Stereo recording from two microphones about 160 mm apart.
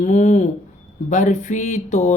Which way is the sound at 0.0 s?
45° left (ahead or behind).